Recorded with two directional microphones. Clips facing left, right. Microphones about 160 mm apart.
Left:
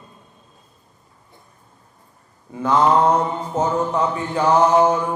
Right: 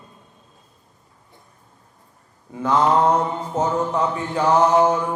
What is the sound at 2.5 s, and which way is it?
A man's voice, 15° left (ahead or behind).